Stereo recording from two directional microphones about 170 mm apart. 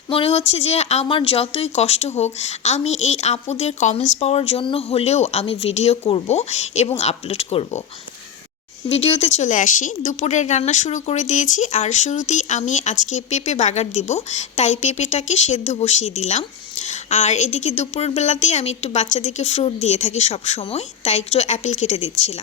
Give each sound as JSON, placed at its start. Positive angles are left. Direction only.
{"t": 0.1, "sound": "speech", "side_deg": 35}
{"t": 8.9, "sound": "speech", "side_deg": 35}